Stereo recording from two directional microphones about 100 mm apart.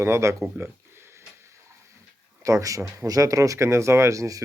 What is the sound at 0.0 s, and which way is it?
Speech, 30° right (ahead or behind).